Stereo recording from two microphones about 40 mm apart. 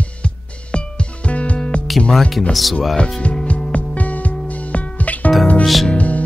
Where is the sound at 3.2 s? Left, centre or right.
Left.